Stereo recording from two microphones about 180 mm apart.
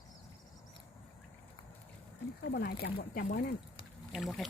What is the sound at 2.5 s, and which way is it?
Speech, 60° left (ahead or behind).